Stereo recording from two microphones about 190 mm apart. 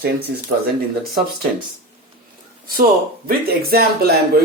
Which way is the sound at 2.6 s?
50° right (ahead or behind).